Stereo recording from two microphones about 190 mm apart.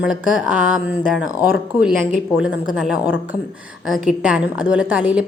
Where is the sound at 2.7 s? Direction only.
5° right (ahead or behind).